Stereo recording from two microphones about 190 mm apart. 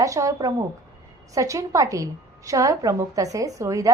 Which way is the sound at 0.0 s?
15° right (ahead or behind).